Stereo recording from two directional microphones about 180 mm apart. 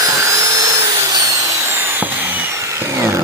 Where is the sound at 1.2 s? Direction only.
20° right (ahead or behind).